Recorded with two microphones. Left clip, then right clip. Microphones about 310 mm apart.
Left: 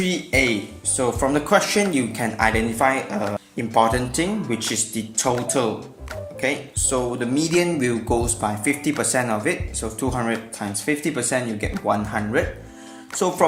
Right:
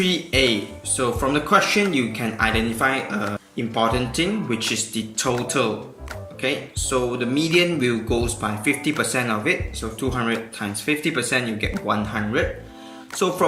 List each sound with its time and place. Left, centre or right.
0.0 s speech: centre
6.9 s speech: left